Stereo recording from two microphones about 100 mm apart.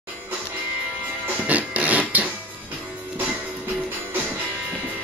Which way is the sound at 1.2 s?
15° right (ahead or behind).